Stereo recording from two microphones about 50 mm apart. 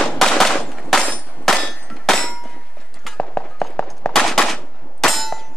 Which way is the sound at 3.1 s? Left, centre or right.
Left.